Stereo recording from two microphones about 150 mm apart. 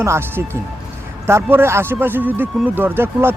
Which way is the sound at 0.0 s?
15° right (ahead or behind).